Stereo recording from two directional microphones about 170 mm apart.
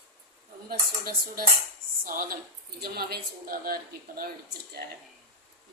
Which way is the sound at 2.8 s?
65° right (ahead or behind).